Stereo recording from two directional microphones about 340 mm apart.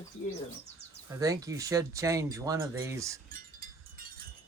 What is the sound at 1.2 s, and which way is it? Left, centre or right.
Speech, centre.